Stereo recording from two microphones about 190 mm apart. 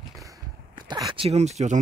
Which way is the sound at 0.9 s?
25° right (ahead or behind).